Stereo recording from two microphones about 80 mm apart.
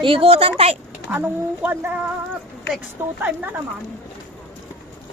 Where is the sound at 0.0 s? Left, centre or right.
Right.